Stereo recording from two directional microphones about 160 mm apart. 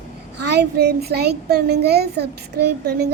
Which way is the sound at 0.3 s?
90° right.